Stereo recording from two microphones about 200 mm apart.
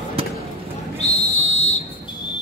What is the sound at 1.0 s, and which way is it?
Whistle, 35° left (ahead or behind).